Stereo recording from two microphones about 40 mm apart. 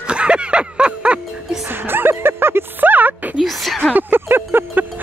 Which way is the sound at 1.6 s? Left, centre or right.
Right.